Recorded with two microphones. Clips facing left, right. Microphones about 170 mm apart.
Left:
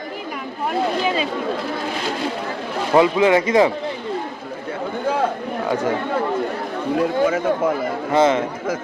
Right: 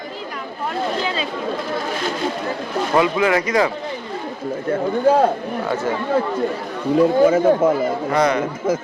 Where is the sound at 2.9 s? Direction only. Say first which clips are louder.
Left 3 dB; 25° left (ahead or behind).